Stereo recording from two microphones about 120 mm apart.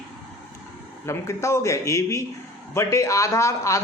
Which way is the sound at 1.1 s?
25° left (ahead or behind).